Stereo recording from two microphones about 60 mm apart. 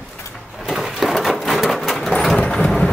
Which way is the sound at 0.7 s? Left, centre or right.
Centre.